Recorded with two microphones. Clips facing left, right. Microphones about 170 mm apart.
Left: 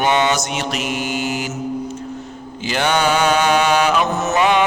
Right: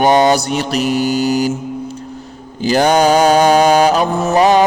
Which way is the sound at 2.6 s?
40° right (ahead or behind).